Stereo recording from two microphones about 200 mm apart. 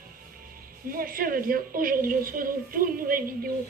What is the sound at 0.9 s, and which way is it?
A woman's voice, 45° right (ahead or behind).